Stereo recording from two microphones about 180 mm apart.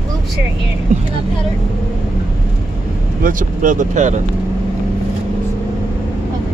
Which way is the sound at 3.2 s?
45° right (ahead or behind).